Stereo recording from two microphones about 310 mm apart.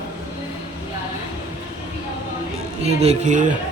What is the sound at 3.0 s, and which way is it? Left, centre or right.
Mantra, right.